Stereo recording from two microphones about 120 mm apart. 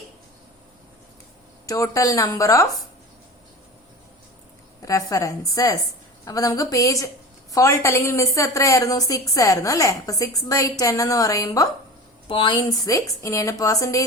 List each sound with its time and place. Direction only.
1.6 s a woman's voice: 25° left (ahead or behind)
4.9 s a woman's voice: 30° left (ahead or behind)
12.3 s a woman's voice: 45° left (ahead or behind); by 14.0 s 30° left (ahead or behind)